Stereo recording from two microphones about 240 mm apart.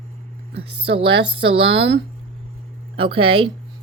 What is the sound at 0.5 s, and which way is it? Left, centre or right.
Speech, right.